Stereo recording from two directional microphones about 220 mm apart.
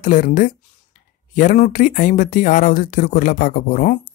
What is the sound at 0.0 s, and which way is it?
Speech, 35° left (ahead or behind).